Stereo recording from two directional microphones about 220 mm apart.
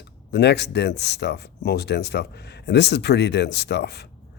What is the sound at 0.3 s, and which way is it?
Speech, 50° left (ahead or behind).